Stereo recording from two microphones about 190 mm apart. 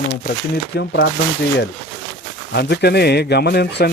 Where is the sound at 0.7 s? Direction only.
65° left (ahead or behind).